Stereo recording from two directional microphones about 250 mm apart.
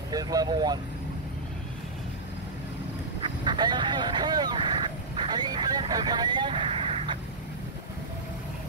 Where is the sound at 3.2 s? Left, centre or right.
Centre.